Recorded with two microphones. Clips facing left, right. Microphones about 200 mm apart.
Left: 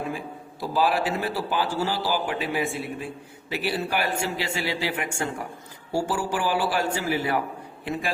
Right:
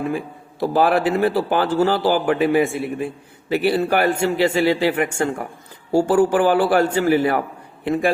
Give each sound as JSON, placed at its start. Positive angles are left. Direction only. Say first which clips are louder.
{"t": 0.6, "sound": "a man's voice", "louder": "right 7 dB", "side_deg": -55}